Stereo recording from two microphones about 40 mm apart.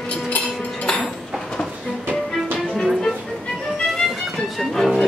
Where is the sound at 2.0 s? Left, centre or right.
Right.